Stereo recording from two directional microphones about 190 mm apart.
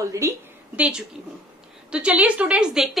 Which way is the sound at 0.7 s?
5° right (ahead or behind).